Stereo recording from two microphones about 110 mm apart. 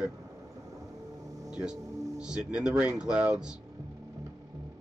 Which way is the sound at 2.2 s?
10° right (ahead or behind).